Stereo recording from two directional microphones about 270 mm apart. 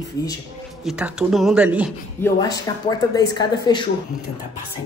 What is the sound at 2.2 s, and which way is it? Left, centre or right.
Speech, centre.